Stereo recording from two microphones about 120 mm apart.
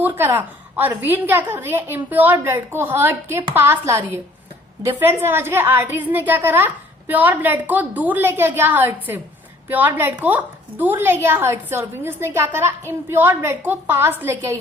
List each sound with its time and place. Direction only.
0.0 s a woman's voice: 15° right (ahead or behind)